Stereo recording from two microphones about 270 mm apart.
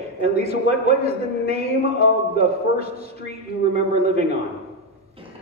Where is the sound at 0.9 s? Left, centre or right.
Right.